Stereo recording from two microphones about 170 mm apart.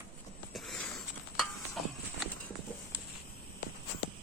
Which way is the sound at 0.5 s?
Centre (ahead or behind).